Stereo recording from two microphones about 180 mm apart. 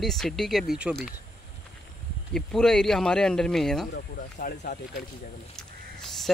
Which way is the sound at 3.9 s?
50° left (ahead or behind).